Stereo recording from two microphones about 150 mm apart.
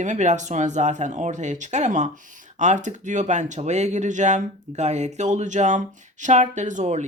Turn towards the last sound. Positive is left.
turn(degrees=-50)  # may be behind; listen again after turning